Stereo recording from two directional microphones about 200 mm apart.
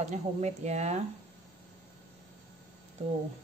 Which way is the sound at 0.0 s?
35° right (ahead or behind).